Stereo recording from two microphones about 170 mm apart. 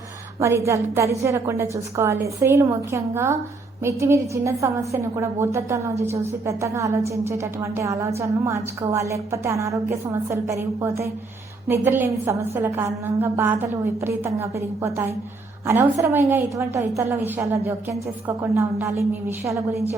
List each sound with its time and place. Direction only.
0.3 s a woman's voice: 15° right (ahead or behind)